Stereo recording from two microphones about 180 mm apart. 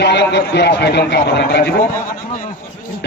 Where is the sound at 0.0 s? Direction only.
70° left (ahead or behind).